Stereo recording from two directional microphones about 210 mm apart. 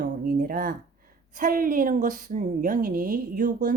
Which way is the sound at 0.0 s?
45° right (ahead or behind).